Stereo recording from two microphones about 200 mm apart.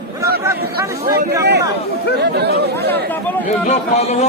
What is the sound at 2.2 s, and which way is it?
Speech, 55° right (ahead or behind).